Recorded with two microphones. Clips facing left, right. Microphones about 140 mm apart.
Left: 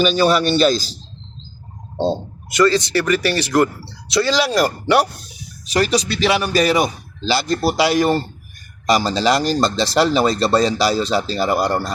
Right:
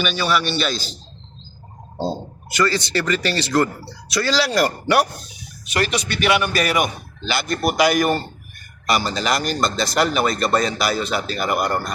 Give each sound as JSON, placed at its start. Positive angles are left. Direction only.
{"t": 0.0, "sound": "speech", "side_deg": 35}
{"t": 2.0, "sound": "speech", "side_deg": 20}
{"t": 5.9, "sound": "speech", "side_deg": 30}